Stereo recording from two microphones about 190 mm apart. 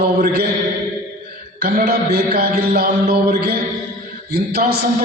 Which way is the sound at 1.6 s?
55° right (ahead or behind).